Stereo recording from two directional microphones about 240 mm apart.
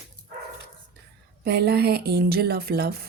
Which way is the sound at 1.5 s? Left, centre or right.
Right.